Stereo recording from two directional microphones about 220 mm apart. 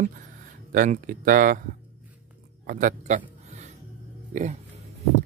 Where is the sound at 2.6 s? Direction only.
40° right (ahead or behind).